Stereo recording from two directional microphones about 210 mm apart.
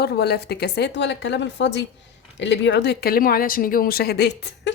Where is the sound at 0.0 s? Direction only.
50° left (ahead or behind).